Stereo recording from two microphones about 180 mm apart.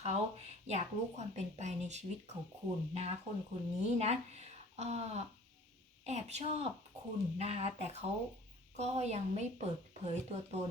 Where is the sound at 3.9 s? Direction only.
35° right (ahead or behind).